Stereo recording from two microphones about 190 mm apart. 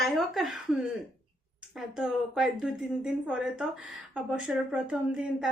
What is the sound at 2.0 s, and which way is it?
Speech, 5° right (ahead or behind).